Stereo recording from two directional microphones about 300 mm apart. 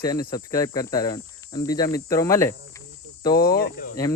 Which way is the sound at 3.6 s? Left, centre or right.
Left.